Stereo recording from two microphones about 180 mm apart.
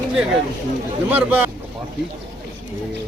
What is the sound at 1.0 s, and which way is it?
Speech, 10° right (ahead or behind).